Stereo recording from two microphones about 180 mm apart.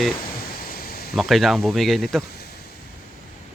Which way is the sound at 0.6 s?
55° left (ahead or behind).